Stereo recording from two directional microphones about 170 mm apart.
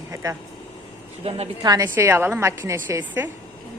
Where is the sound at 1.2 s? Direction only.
35° right (ahead or behind).